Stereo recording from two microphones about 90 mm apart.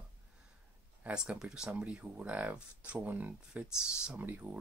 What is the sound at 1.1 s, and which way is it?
Speech, 10° right (ahead or behind).